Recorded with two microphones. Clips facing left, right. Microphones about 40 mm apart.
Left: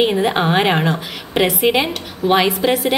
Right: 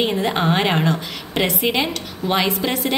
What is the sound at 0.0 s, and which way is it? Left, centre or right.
A woman's voice, centre.